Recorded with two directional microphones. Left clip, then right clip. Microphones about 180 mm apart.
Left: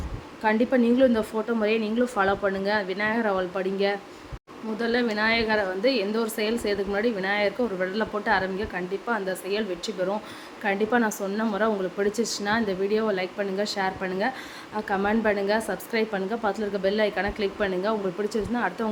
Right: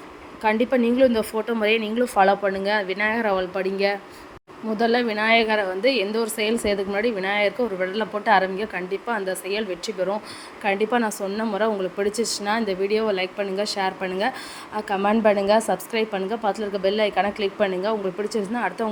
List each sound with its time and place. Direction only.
0.4 s a woman's voice: 15° right (ahead or behind)